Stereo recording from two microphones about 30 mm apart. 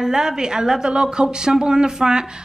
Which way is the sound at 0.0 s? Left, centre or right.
Centre.